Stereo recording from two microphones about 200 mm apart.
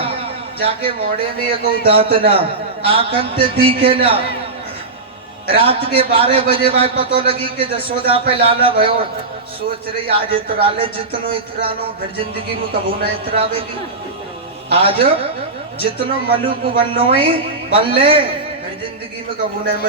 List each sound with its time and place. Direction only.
0.6 s a man's voice: 25° right (ahead or behind)
5.5 s a man's voice: 30° right (ahead or behind)
10.1 s a man's voice: 25° right (ahead or behind)
14.7 s a man's voice: 30° right (ahead or behind)